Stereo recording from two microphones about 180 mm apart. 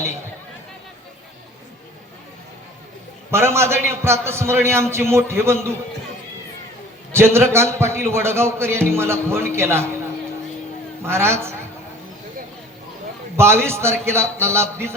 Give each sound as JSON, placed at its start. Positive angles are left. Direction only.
{"t": 3.3, "sound": "a man's voice", "side_deg": -15}
{"t": 7.1, "sound": "a man's voice", "side_deg": -15}
{"t": 11.0, "sound": "a man's voice", "side_deg": -15}
{"t": 13.3, "sound": "a man's voice", "side_deg": -15}